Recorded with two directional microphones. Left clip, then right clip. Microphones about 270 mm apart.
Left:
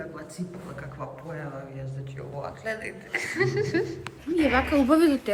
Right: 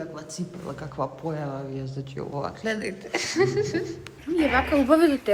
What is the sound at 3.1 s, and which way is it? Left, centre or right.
A woman's voice, centre.